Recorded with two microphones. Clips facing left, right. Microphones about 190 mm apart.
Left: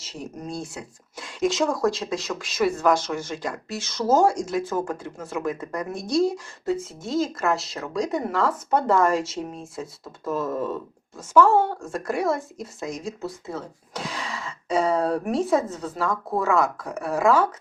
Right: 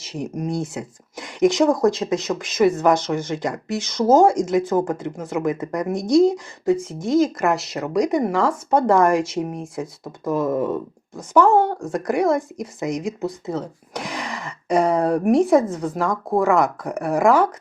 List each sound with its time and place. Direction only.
0.0 s speech: 15° right (ahead or behind)